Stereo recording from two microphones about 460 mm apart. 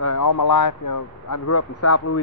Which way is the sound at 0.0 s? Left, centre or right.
Left.